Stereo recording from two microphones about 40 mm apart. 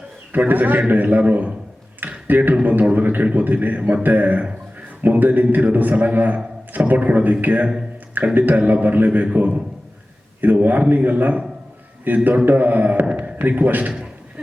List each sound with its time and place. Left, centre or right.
0.3 s a man's voice: right
2.0 s a sound: right
2.9 s a man's voice: right